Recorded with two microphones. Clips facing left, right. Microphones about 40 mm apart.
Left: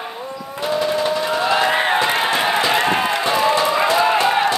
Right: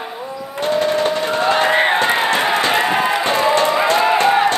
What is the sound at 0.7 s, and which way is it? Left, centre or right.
Crowd, right.